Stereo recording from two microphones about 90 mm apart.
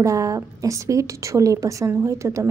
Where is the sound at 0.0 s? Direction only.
35° right (ahead or behind).